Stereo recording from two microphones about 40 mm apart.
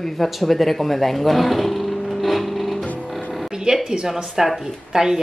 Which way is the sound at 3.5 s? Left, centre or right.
Centre.